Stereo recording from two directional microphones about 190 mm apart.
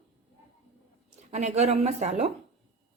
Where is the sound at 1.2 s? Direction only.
35° right (ahead or behind).